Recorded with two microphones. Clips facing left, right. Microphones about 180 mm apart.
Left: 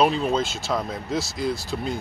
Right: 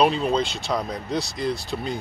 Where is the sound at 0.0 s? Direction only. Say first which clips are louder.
Right 1 dB; centre (ahead or behind).